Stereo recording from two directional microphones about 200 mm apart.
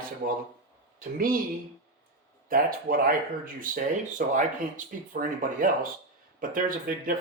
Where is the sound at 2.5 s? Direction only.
45° right (ahead or behind).